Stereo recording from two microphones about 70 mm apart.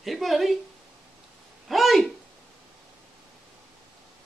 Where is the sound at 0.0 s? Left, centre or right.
Centre.